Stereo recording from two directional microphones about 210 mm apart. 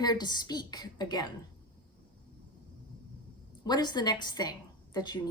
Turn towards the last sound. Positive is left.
turn(degrees=20)  # may be behind; listen again after turning